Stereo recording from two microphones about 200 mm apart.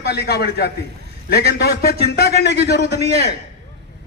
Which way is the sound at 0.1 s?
55° left (ahead or behind).